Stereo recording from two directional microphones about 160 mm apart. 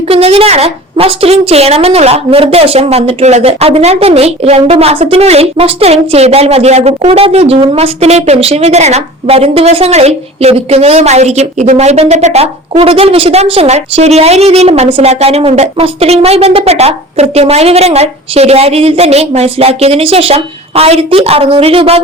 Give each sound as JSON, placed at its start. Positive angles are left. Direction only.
{"t": 0.1, "sound": "a woman's voice", "side_deg": -40}